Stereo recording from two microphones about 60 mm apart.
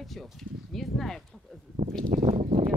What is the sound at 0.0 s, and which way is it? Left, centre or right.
Speech, centre.